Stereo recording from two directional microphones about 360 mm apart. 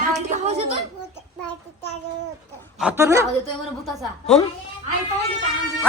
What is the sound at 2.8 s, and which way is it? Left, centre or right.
Speech, centre.